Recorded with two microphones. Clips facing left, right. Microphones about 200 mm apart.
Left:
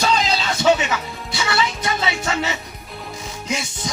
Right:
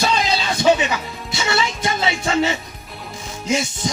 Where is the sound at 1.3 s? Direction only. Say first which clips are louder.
Right 1 dB; 25° right (ahead or behind).